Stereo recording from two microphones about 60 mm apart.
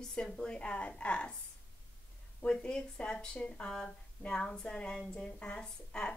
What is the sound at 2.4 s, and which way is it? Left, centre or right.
Speech, centre.